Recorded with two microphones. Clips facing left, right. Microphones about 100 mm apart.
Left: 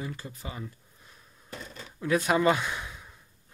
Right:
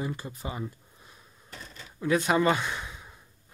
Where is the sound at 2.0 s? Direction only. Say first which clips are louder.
Right 1 dB; centre (ahead or behind).